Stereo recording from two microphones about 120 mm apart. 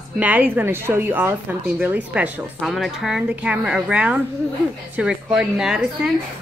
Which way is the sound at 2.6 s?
Centre (ahead or behind).